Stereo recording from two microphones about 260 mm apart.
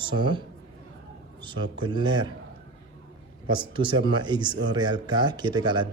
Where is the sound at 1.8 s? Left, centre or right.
Centre.